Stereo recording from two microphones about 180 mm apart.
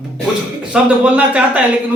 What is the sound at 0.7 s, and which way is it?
Speech, 10° right (ahead or behind).